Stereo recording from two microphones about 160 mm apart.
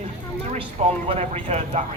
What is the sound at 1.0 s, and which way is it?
Speech, 45° right (ahead or behind).